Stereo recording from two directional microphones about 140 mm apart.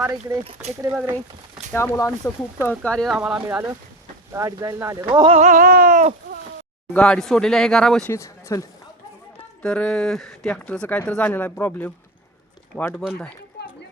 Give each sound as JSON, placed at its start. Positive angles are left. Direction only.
{"t": 0.0, "sound": "speech", "side_deg": -15}
{"t": 1.7, "sound": "speech", "side_deg": 20}
{"t": 2.6, "sound": "speech", "side_deg": 10}
{"t": 3.2, "sound": "speech", "side_deg": -5}
{"t": 4.3, "sound": "speech", "side_deg": -20}
{"t": 5.2, "sound": "a sound", "side_deg": -45}
{"t": 5.5, "sound": "a sound", "side_deg": -85}
{"t": 6.9, "sound": "speech", "side_deg": 5}
{"t": 8.1, "sound": "speech", "side_deg": 20}
{"t": 9.6, "sound": "speech", "side_deg": 5}